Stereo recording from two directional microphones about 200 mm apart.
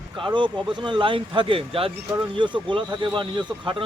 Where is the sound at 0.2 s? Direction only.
25° right (ahead or behind).